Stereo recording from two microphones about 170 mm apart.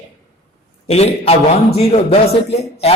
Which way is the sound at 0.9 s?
35° left (ahead or behind).